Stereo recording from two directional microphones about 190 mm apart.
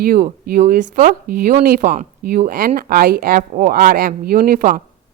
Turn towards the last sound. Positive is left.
turn(degrees=-45)  # may be behind; listen again after turning